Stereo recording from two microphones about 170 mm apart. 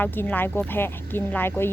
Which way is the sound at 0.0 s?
10° left (ahead or behind).